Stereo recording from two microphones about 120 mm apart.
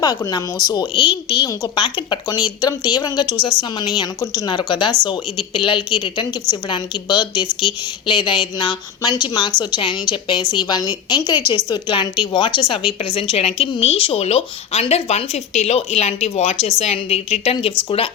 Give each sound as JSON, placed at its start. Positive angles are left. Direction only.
{"t": 0.0, "sound": "a woman's voice", "side_deg": 30}
{"t": 11.3, "sound": "a woman's voice", "side_deg": -20}
{"t": 11.7, "sound": "a woman's voice", "side_deg": 40}